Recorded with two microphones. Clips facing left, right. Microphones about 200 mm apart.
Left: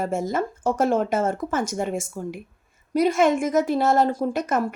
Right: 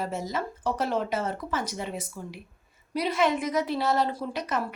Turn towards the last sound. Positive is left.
turn(degrees=50)  # may be behind; listen again after turning